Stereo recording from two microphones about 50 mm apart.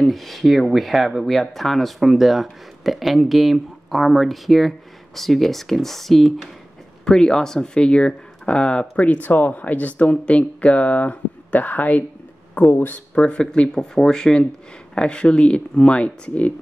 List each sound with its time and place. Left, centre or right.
0.0 s speech: centre; by 13.0 s left
13.1 s speech: left